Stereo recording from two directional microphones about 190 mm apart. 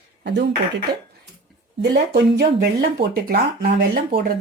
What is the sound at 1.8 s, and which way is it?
Speech, 60° right (ahead or behind).